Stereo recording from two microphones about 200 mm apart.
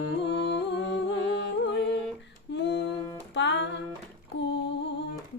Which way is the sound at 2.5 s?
60° left (ahead or behind).